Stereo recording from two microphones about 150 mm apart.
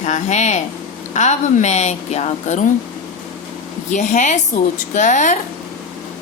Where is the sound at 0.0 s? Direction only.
50° left (ahead or behind).